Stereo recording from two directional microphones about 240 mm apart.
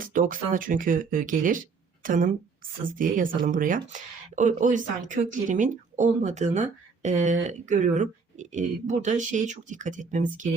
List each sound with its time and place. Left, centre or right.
0.0 s speech: right